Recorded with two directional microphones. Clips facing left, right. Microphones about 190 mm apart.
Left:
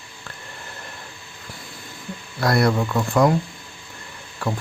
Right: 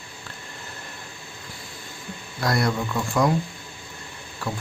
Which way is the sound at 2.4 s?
60° left (ahead or behind).